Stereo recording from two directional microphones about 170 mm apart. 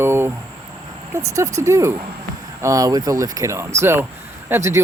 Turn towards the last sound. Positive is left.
turn(degrees=-15)  # may be behind; listen again after turning